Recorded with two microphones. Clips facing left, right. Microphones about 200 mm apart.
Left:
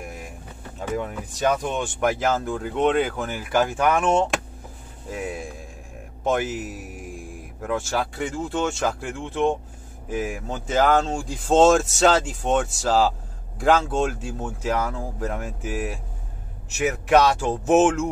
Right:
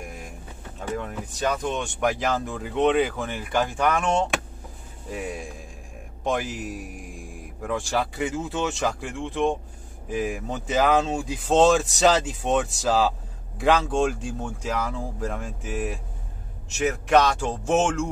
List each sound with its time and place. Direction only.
1.6 s speech: 5° left (ahead or behind)